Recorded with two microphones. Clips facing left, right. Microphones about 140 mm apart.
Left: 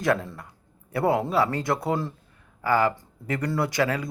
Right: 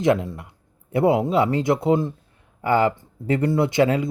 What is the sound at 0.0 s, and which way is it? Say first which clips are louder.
Speech: right 5 dB; 20° right (ahead or behind).